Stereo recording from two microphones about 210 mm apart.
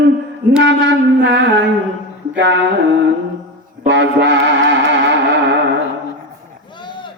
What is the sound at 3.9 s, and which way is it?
Music, 60° right (ahead or behind).